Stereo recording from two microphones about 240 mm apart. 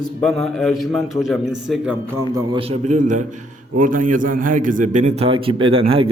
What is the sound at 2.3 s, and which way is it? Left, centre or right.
A man's voice, right.